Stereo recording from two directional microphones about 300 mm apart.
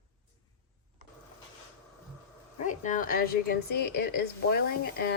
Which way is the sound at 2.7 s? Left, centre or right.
Left.